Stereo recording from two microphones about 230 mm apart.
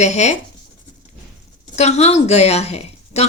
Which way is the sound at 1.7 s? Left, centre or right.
Left.